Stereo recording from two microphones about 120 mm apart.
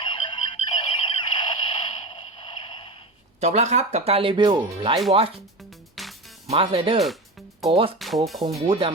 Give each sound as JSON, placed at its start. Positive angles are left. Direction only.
{"t": 0.0, "sound": "music", "side_deg": 45}
{"t": 3.4, "sound": "speech", "side_deg": -75}
{"t": 5.5, "sound": "music", "side_deg": 0}
{"t": 6.5, "sound": "speech", "side_deg": -55}
{"t": 7.0, "sound": "music", "side_deg": 0}
{"t": 7.7, "sound": "speech", "side_deg": -45}
{"t": 7.9, "sound": "speech", "side_deg": 0}
{"t": 8.6, "sound": "speech", "side_deg": -45}